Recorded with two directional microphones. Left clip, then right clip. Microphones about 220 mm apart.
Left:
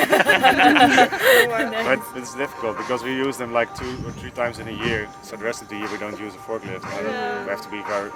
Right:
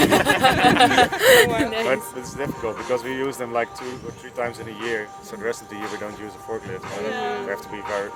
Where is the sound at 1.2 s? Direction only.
45° right (ahead or behind).